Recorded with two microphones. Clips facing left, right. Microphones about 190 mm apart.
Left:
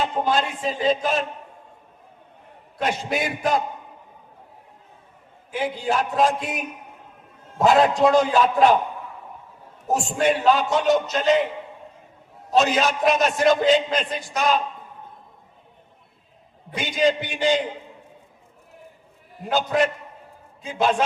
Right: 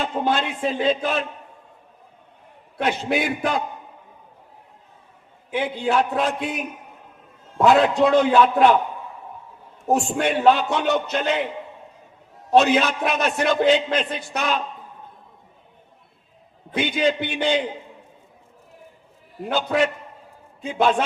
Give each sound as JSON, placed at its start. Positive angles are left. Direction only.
{"t": 0.0, "sound": "a man's voice", "side_deg": -60}
{"t": 2.7, "sound": "a man's voice", "side_deg": -60}
{"t": 5.5, "sound": "a man's voice", "side_deg": -60}
{"t": 7.6, "sound": "a man's voice", "side_deg": -60}
{"t": 9.9, "sound": "a man's voice", "side_deg": -60}
{"t": 12.5, "sound": "a man's voice", "side_deg": -60}
{"t": 16.7, "sound": "a man's voice", "side_deg": -60}
{"t": 19.5, "sound": "a man's voice", "side_deg": -60}